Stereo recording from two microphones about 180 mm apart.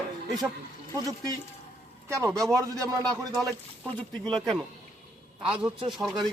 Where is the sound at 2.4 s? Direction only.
20° right (ahead or behind).